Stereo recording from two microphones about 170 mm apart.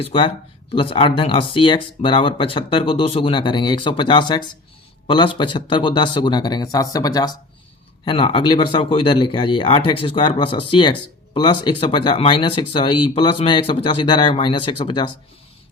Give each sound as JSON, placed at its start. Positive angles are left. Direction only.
{"t": 0.0, "sound": "speech", "side_deg": 30}